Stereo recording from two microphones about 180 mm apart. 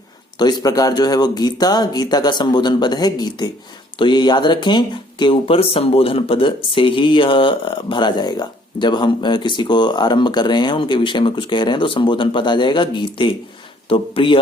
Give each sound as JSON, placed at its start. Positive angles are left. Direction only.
{"t": 0.3, "sound": "speech", "side_deg": 25}